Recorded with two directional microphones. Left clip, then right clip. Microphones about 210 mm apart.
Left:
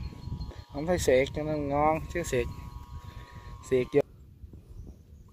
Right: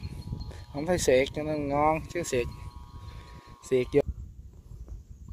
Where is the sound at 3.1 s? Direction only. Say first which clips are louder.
Even; 10° right (ahead or behind).